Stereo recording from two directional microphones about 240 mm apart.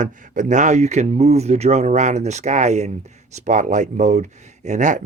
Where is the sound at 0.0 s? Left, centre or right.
Right.